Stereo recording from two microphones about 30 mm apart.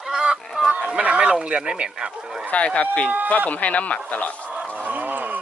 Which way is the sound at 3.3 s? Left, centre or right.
Left.